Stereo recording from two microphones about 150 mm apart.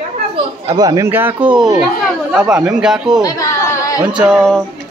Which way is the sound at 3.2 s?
20° left (ahead or behind).